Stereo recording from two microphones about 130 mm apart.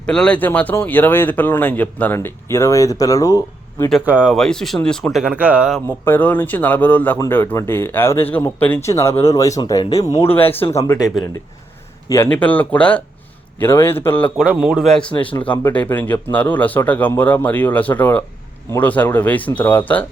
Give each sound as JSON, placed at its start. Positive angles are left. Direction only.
{"t": 0.0, "sound": "speech", "side_deg": 5}
{"t": 4.0, "sound": "speech", "side_deg": -10}
{"t": 6.1, "sound": "speech", "side_deg": 15}
{"t": 10.2, "sound": "speech", "side_deg": 15}
{"t": 12.1, "sound": "speech", "side_deg": 15}
{"t": 14.3, "sound": "speech", "side_deg": -5}